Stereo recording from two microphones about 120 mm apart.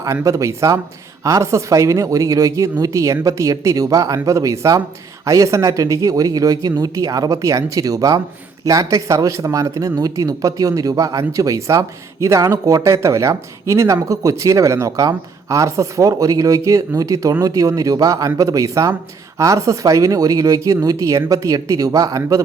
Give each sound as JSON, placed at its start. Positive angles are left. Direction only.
{"t": 0.0, "sound": "speech", "side_deg": -25}